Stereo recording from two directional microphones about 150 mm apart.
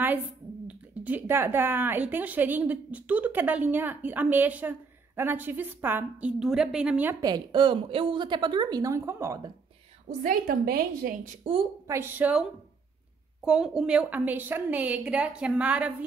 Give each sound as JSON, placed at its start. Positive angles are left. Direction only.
{"t": 0.7, "sound": "speech", "side_deg": -10}
{"t": 6.4, "sound": "speech", "side_deg": -5}
{"t": 7.2, "sound": "a woman's voice", "side_deg": -30}
{"t": 10.0, "sound": "a woman's voice", "side_deg": -65}
{"t": 11.9, "sound": "speech", "side_deg": -15}
{"t": 13.5, "sound": "speech", "side_deg": -5}